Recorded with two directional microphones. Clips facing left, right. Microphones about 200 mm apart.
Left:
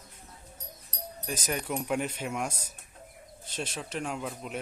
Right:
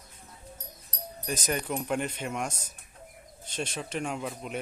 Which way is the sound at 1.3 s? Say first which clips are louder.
Right 2 dB; 5° left (ahead or behind).